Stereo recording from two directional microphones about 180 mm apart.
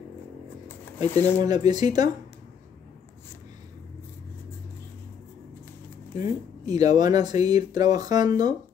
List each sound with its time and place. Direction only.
0.7 s a sound: 10° left (ahead or behind)
1.4 s speech: 20° right (ahead or behind)
6.6 s speech: 20° right (ahead or behind)